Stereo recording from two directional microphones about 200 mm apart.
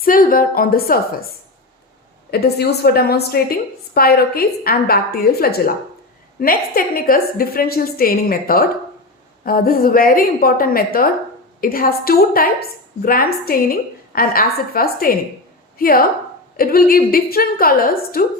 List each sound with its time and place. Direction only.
0.0 s a woman's voice: 45° left (ahead or behind)
2.3 s a woman's voice: 55° left (ahead or behind)